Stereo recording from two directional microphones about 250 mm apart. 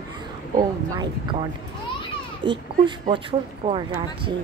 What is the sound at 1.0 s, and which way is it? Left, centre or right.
Speech, centre.